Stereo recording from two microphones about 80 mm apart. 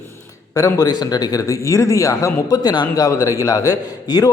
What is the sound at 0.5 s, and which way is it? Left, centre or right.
Speech, left.